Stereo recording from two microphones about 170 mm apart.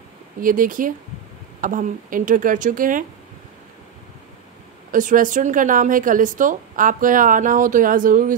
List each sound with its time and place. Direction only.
0.4 s a woman's voice: 55° right (ahead or behind)
4.9 s a woman's voice: 50° right (ahead or behind)